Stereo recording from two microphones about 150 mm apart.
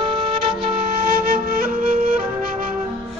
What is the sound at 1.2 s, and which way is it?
Flute, 90° right.